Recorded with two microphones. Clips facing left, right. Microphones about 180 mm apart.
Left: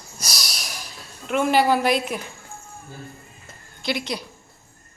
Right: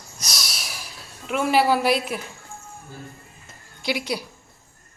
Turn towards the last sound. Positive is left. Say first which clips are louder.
# right 1 dB
turn(degrees=-10)  # may be behind; listen again after turning